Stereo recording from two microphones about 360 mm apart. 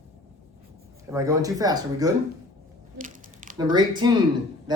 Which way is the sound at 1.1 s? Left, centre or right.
Centre.